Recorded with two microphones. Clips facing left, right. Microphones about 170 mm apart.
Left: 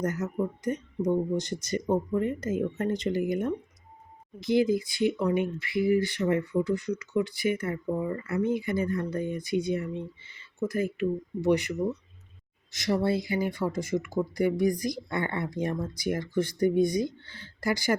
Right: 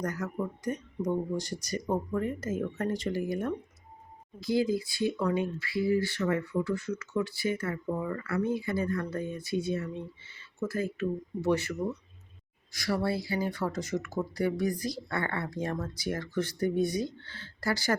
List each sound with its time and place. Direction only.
0.0 s speech: 20° left (ahead or behind)
12.7 s speech: 20° left (ahead or behind)